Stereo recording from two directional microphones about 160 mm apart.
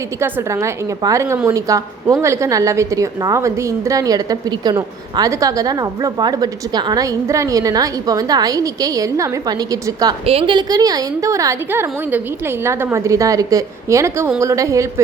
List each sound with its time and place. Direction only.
0.2 s a woman's voice: 15° right (ahead or behind)
10.2 s a woman's voice: 35° right (ahead or behind); by 15.0 s 20° right (ahead or behind)